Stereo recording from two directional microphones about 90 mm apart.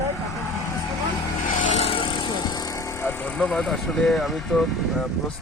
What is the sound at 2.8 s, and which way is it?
Speech, 30° left (ahead or behind).